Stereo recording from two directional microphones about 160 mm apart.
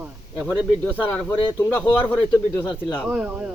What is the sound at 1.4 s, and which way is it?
Speech, 20° left (ahead or behind).